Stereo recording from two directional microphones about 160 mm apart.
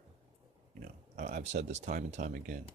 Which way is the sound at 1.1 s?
50° right (ahead or behind).